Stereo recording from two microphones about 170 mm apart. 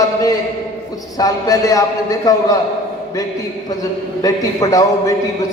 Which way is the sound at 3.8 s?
20° left (ahead or behind).